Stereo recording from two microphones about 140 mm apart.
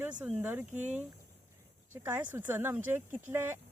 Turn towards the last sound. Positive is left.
turn(degrees=-15)  # may be behind; listen again after turning